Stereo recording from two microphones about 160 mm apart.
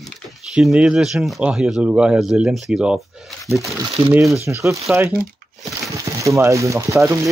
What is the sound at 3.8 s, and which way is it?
Speech, 20° right (ahead or behind).